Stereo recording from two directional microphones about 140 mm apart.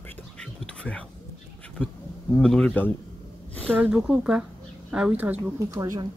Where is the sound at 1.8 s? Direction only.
10° left (ahead or behind).